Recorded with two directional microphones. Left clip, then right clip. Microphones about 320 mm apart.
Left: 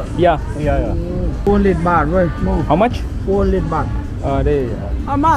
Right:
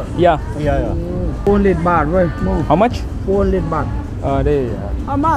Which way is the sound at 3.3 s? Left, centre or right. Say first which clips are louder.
Even; centre.